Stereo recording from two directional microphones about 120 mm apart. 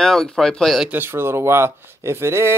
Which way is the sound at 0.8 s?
15° right (ahead or behind).